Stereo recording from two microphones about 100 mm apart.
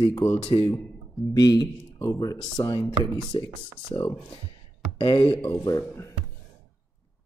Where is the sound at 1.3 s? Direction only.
40° left (ahead or behind).